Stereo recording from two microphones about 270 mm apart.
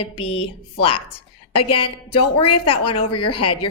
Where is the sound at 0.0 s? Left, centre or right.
Centre.